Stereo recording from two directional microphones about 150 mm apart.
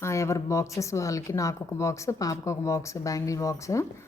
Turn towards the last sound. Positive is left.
turn(degrees=20)  # may be behind; listen again after turning